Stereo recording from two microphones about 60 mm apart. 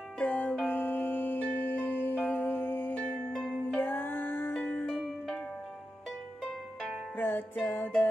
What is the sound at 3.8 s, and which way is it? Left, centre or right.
Music, left.